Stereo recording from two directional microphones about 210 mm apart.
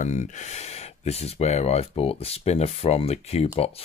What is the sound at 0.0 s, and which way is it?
Speech, 35° left (ahead or behind).